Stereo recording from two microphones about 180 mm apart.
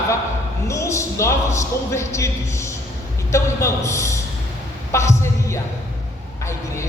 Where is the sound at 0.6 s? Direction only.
15° left (ahead or behind).